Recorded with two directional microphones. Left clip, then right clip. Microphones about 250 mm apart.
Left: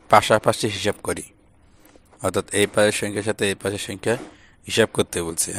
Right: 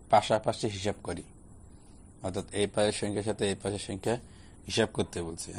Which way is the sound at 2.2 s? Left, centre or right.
Left.